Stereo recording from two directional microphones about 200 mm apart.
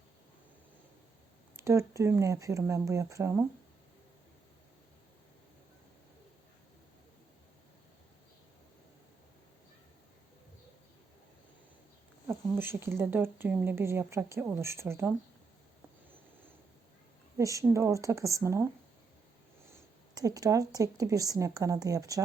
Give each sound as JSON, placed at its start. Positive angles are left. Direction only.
{"t": 1.5, "sound": "speech", "side_deg": -15}
{"t": 12.3, "sound": "speech", "side_deg": -10}
{"t": 17.3, "sound": "speech", "side_deg": -15}
{"t": 19.7, "sound": "speech", "side_deg": -15}